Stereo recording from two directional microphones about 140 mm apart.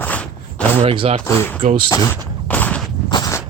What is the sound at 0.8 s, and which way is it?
Speech, 40° right (ahead or behind).